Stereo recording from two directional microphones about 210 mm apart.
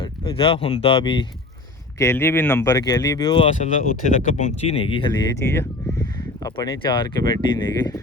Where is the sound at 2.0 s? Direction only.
10° left (ahead or behind).